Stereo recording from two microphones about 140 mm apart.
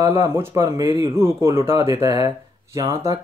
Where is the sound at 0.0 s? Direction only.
20° right (ahead or behind).